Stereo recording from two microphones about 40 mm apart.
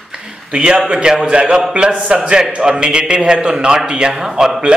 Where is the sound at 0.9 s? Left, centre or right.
Centre.